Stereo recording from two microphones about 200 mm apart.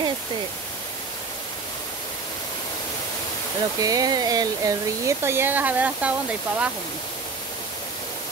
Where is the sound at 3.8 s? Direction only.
20° right (ahead or behind).